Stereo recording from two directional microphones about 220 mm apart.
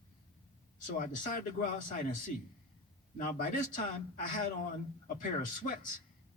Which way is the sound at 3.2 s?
35° left (ahead or behind).